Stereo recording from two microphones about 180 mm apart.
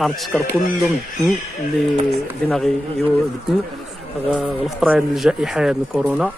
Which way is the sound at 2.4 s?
Centre (ahead or behind).